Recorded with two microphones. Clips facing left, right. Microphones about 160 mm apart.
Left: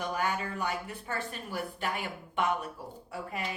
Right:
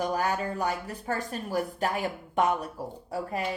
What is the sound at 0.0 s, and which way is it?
A woman's voice, 35° right (ahead or behind).